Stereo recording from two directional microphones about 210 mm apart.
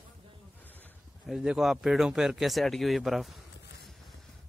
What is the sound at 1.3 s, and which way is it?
Speech, centre (ahead or behind).